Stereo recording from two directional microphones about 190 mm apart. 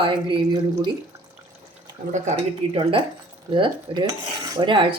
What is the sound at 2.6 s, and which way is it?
Speech, 30° right (ahead or behind).